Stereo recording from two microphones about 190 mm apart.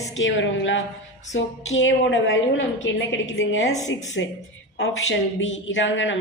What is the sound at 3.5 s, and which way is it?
Speech, 90° left.